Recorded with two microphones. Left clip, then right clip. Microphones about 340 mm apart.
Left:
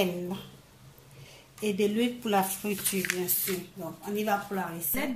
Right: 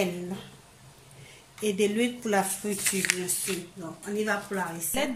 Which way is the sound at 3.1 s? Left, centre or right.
Centre.